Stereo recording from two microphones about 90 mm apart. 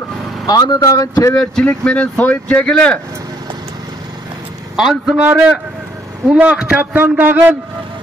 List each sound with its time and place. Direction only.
0.5 s speech: 50° left (ahead or behind)
1.3 s speech: 10° left (ahead or behind)
4.7 s a man's voice: 5° right (ahead or behind)
6.2 s a man's voice: 10° right (ahead or behind)